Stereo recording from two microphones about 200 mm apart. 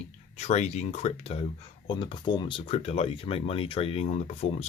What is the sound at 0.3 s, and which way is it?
Speech, 35° left (ahead or behind).